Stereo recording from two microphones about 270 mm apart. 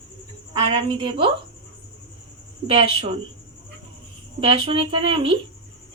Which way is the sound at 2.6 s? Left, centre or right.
Right.